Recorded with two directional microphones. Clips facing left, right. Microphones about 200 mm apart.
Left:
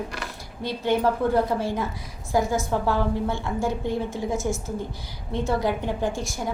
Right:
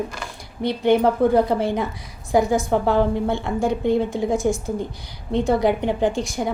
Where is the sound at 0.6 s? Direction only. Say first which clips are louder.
Right 7 dB; 65° right (ahead or behind).